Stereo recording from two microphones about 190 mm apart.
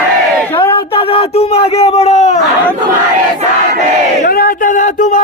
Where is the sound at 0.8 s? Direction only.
30° left (ahead or behind).